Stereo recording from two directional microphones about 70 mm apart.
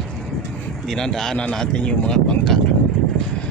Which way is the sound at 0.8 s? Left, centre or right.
Centre.